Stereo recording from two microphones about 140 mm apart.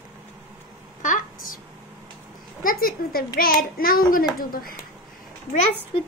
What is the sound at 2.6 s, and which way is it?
A child's voice, 90° left.